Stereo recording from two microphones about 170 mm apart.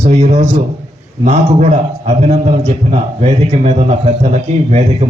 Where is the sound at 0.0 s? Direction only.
40° right (ahead or behind).